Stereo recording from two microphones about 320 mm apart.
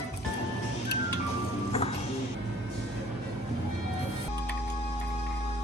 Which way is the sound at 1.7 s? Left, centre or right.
Centre.